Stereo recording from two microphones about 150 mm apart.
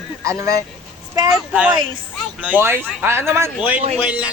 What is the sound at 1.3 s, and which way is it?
Speech, 5° right (ahead or behind).